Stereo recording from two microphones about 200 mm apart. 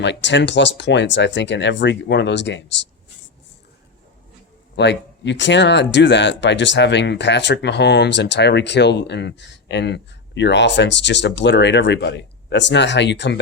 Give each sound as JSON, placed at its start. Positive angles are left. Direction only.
{"t": 0.0, "sound": "speech", "side_deg": 60}
{"t": 4.8, "sound": "speech", "side_deg": 60}